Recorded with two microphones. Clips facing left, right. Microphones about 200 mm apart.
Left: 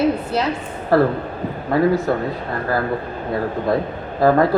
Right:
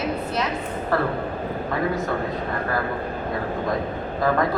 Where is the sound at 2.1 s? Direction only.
35° left (ahead or behind).